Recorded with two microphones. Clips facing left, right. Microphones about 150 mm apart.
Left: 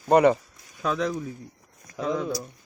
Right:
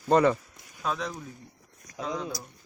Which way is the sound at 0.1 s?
65° left (ahead or behind).